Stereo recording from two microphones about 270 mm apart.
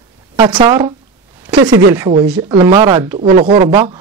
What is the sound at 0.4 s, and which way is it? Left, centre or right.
Speech, centre.